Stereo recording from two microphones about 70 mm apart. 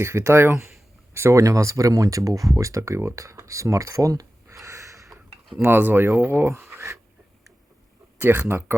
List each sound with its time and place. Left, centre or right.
0.0 s speech: right
5.6 s speech: right
6.7 s a sound: right
8.2 s speech: right
8.4 s speech: right